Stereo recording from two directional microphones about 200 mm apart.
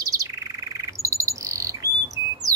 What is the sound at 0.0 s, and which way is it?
Bird, 15° right (ahead or behind).